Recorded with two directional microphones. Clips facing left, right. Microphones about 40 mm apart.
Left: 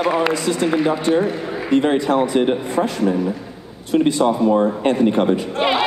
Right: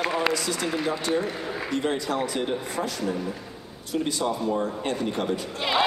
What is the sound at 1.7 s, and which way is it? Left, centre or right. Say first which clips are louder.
A man's voice: left 11 dB; left.